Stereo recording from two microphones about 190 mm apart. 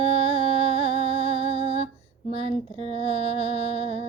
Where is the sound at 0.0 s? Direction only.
25° left (ahead or behind).